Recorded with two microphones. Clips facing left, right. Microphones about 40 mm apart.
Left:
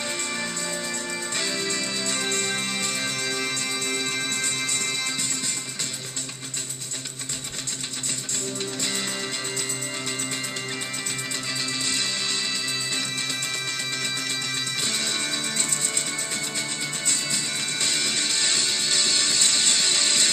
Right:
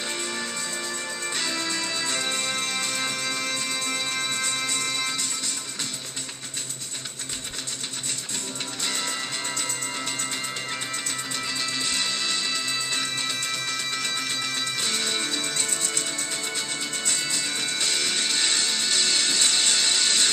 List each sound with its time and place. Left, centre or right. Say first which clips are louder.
1.3 s music: even; centre
2.5 s music: even; centre
12.4 s music: right 1 dB; centre
15.2 s music: even; centre
16.5 s music: even; centre
18.3 s music: even; right
19.9 s music: even; left